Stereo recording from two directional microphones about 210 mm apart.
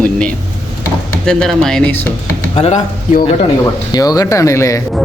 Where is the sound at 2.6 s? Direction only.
35° left (ahead or behind).